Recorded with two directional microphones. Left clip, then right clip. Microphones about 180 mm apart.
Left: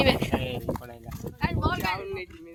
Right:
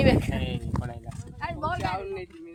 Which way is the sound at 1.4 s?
60° right (ahead or behind).